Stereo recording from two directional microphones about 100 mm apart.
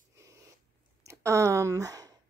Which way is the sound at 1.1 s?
30° right (ahead or behind).